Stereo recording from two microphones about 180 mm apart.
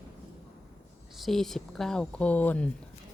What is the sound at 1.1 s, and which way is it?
Speech, centre (ahead or behind).